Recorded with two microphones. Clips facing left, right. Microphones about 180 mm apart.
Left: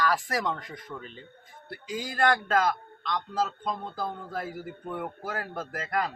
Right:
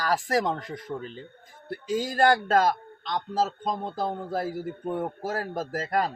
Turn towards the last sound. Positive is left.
turn(degrees=-35)  # may be behind; listen again after turning